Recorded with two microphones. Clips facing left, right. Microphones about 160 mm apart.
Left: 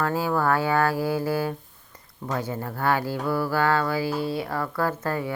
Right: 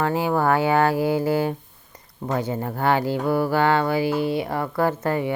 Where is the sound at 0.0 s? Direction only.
20° right (ahead or behind).